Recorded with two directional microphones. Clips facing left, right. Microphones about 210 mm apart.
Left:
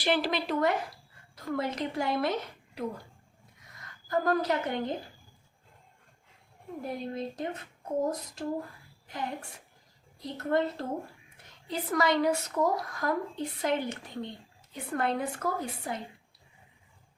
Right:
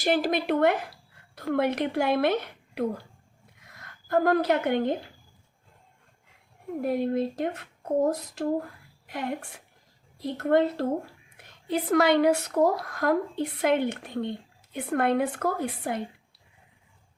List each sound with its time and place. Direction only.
0.0 s a woman's voice: 45° right (ahead or behind); by 4.9 s 65° right (ahead or behind)
6.8 s speech: 65° right (ahead or behind)